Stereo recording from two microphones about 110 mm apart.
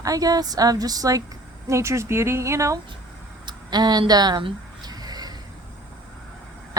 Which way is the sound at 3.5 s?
40° right (ahead or behind).